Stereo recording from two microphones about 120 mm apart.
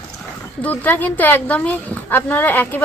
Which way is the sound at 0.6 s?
15° left (ahead or behind).